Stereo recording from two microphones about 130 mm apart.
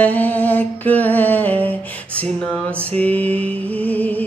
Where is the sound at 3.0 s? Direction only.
10° left (ahead or behind).